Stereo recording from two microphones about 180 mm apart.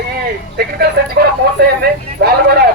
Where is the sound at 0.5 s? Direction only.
60° right (ahead or behind).